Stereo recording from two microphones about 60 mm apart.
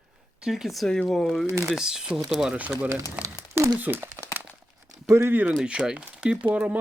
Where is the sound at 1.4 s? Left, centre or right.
Right.